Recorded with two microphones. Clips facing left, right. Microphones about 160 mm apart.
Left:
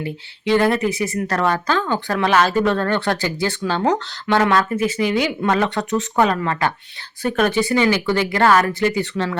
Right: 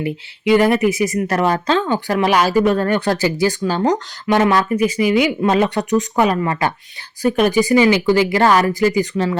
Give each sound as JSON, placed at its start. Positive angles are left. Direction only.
{"t": 0.0, "sound": "speech", "side_deg": -15}
{"t": 5.5, "sound": "speech", "side_deg": -20}